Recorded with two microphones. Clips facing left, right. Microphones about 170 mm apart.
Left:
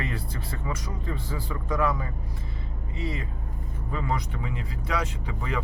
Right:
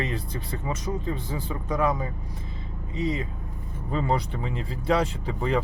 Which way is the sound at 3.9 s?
30° right (ahead or behind).